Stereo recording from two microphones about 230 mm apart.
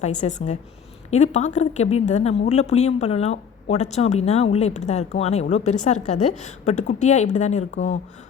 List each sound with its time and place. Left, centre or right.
0.0 s a woman's voice: left